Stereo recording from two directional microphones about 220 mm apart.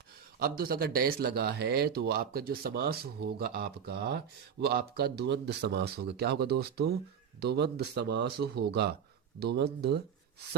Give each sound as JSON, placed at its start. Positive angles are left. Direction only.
{"t": 0.3, "sound": "speech", "side_deg": -45}